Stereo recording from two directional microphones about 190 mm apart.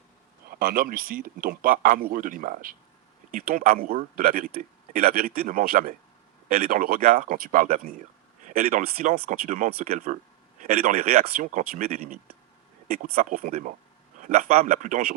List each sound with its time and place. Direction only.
0.5 s speech: 50° right (ahead or behind)